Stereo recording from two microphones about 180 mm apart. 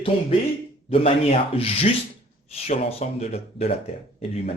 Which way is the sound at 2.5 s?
35° left (ahead or behind).